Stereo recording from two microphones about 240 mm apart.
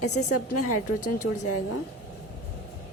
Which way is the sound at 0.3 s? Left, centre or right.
Left.